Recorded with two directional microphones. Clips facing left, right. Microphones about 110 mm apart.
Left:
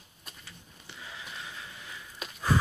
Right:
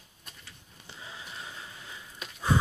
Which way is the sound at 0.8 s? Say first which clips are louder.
Even; 25° right (ahead or behind).